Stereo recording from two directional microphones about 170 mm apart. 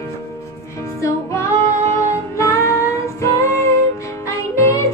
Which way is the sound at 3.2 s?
15° left (ahead or behind).